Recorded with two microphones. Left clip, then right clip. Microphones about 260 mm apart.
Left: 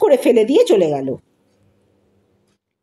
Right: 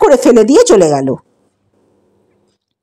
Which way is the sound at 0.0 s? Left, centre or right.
Right.